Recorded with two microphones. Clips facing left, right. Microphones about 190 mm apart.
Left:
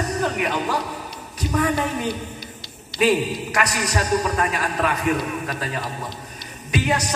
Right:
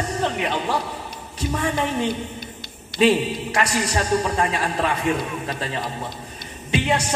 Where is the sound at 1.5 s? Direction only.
30° right (ahead or behind).